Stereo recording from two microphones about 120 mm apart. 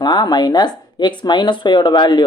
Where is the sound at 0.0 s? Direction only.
35° left (ahead or behind).